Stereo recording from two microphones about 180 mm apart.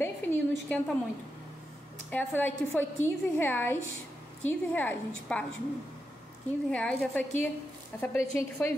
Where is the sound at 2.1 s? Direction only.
10° left (ahead or behind).